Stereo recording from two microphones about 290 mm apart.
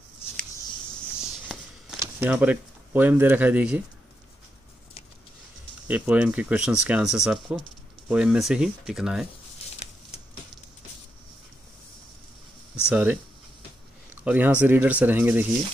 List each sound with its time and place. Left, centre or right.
1.5 s a sound: centre
2.0 s speech: centre
5.9 s speech: centre
12.8 s speech: centre
14.2 s speech: centre